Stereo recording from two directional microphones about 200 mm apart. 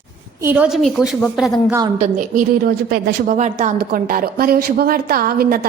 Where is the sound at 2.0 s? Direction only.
40° right (ahead or behind).